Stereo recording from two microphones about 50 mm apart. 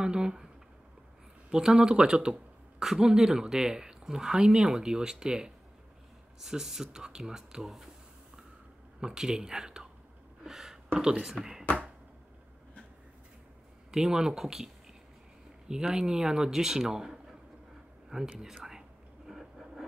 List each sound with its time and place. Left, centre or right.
0.0 s speech: centre
1.5 s speech: centre
9.0 s speech: centre
10.4 s a sound: centre
11.0 s speech: centre
13.9 s speech: centre
18.1 s a sound: centre